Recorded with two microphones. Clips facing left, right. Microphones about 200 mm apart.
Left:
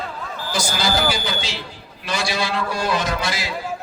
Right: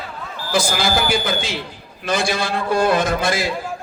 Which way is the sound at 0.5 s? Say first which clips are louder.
Right 3 dB; 55° right (ahead or behind).